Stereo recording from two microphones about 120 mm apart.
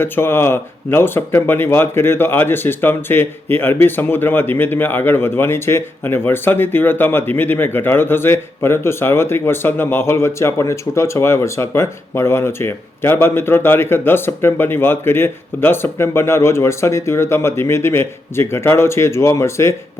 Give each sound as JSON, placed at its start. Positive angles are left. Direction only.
{"t": 0.0, "sound": "speech", "side_deg": 20}